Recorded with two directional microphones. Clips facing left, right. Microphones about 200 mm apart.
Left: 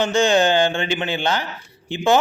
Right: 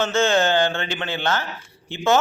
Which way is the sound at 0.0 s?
15° left (ahead or behind).